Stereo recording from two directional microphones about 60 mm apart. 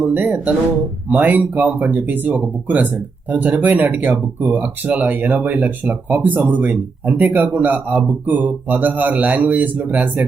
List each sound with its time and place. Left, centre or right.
0.0 s speech: right